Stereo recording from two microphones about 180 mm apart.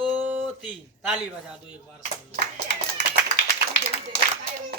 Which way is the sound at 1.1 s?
5° right (ahead or behind).